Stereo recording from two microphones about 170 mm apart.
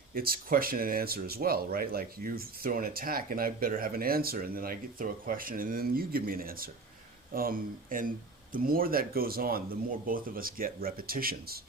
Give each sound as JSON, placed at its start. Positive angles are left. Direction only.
{"t": 0.1, "sound": "speech", "side_deg": -60}